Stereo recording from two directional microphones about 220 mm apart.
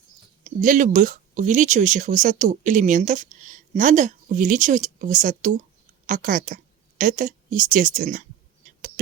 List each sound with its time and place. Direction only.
0.4 s speech: 35° right (ahead or behind)